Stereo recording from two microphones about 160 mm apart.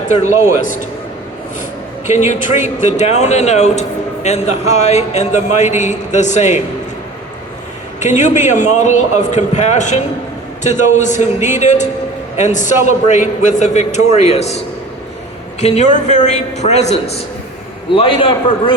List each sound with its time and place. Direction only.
0.1 s speech: 45° left (ahead or behind)
2.0 s speech: 50° left (ahead or behind)
7.9 s speech: 50° left (ahead or behind)
15.6 s speech: 45° left (ahead or behind)
17.9 s a man's voice: 35° left (ahead or behind)